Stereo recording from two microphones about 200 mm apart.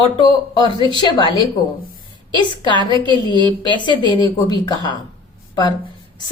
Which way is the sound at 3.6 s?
25° left (ahead or behind).